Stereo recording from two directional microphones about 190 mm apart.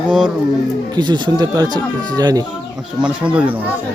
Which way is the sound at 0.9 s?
25° right (ahead or behind).